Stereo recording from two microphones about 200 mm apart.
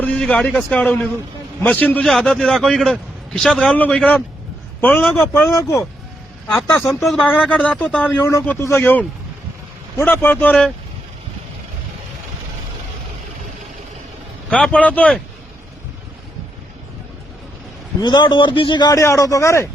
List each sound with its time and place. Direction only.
0.0 s a man's voice: 5° left (ahead or behind)
7.0 s a man's voice: centre (ahead or behind)
14.5 s a man's voice: 5° left (ahead or behind)
18.0 s a man's voice: 20° left (ahead or behind)